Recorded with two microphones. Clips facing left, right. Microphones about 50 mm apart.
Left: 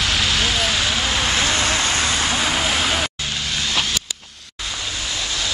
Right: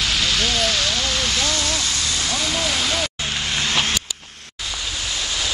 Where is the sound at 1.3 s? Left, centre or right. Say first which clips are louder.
Left 3 dB; left.